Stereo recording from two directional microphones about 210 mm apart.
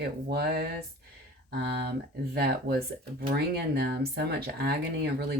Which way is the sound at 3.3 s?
50° right (ahead or behind).